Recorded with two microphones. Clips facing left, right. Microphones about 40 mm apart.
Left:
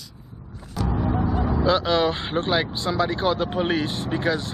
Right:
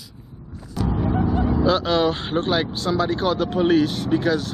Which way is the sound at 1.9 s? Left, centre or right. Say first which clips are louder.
Right 1 dB; centre.